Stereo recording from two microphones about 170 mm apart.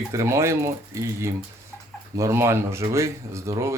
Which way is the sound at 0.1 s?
15° right (ahead or behind).